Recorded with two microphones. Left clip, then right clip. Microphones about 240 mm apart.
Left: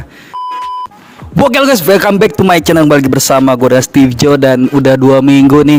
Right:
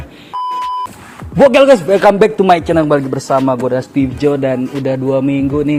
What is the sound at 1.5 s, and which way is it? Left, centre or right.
Speech, left.